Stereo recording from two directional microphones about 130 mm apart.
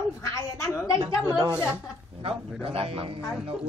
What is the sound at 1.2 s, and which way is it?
Speech, 30° right (ahead or behind).